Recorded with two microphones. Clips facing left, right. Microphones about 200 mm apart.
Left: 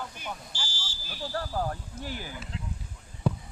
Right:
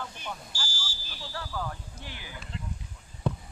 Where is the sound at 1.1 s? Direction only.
45° left (ahead or behind).